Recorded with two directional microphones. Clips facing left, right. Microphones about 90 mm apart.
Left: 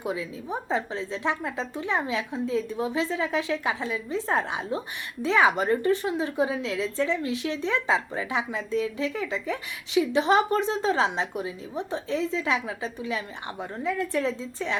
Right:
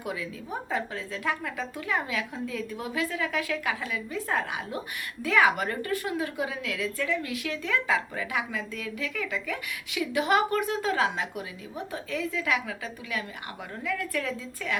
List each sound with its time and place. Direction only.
0.0 s a woman's voice: 25° left (ahead or behind)